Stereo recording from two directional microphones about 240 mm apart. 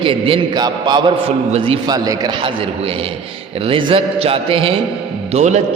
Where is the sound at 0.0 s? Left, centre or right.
Right.